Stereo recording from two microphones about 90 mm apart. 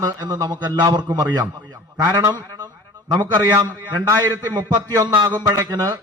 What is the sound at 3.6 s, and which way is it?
Speech, 50° right (ahead or behind).